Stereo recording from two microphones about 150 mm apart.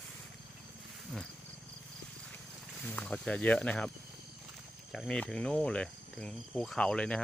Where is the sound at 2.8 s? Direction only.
5° left (ahead or behind).